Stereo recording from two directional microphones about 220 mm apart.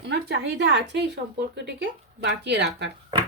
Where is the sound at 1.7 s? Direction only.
50° right (ahead or behind).